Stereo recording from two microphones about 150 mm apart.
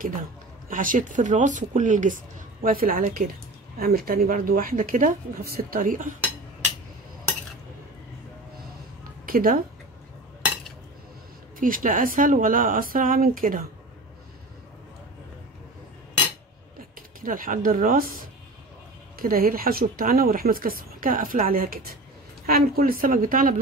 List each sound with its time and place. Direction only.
0.7 s speech: 65° right (ahead or behind)
9.2 s a sound: 70° right (ahead or behind)
11.6 s speech: 65° right (ahead or behind)
17.2 s speech: 65° right (ahead or behind)
19.1 s speech: 75° right (ahead or behind)